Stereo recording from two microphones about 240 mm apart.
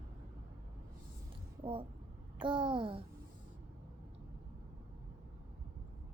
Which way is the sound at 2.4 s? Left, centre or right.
Centre.